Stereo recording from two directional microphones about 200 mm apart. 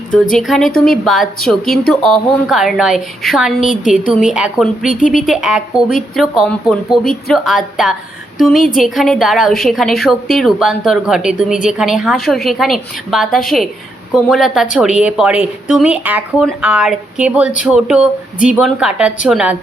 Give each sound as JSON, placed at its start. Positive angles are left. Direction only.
{"t": 0.1, "sound": "a woman's voice", "side_deg": 0}
{"t": 8.5, "sound": "a woman's voice", "side_deg": 40}
{"t": 8.8, "sound": "a woman's voice", "side_deg": 0}